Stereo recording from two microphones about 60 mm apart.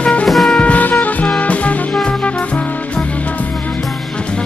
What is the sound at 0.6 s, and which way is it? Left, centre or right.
Music, left.